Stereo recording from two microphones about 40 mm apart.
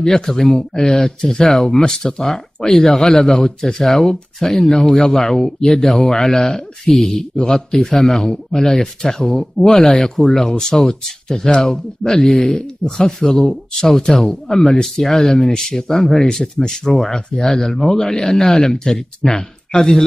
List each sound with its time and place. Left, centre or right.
0.0 s speech: centre
12.4 s speech: left
12.9 s speech: centre
19.3 s speech: left